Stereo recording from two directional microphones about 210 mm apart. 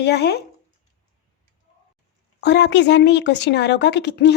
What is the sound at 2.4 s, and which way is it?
Speech, 55° left (ahead or behind).